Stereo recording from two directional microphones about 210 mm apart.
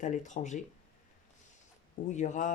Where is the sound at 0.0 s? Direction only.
35° left (ahead or behind).